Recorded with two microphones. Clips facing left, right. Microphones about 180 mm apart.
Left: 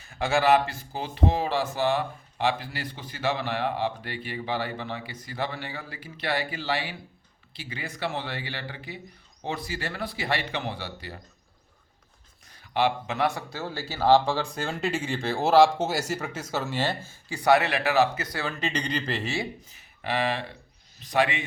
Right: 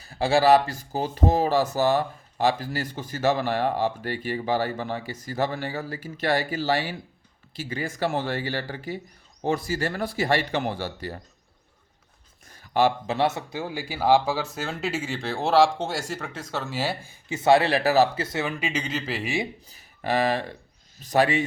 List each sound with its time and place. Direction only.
0.0 s speech: 35° right (ahead or behind)
12.5 s a sound: 45° right (ahead or behind)
13.1 s speech: 25° right (ahead or behind)
18.6 s speech: 5° right (ahead or behind)
19.6 s speech: 40° right (ahead or behind)